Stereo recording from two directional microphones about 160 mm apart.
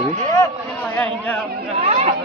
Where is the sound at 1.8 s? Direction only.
40° right (ahead or behind).